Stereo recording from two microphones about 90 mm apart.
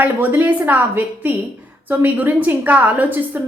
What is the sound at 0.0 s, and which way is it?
A woman's voice, 20° right (ahead or behind).